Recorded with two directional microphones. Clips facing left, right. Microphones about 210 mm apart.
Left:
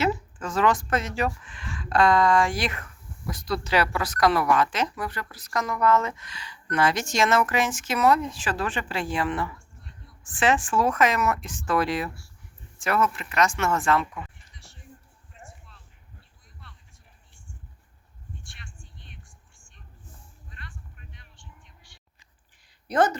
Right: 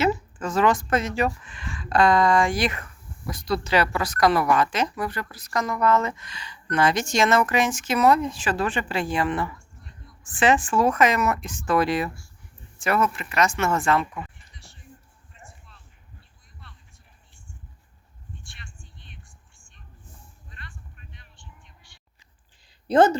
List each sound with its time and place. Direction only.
0.0 s a woman's voice: centre (ahead or behind)
22.9 s a woman's voice: 25° right (ahead or behind)